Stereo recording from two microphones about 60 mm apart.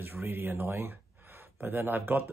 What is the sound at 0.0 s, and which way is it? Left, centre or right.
Speech, right.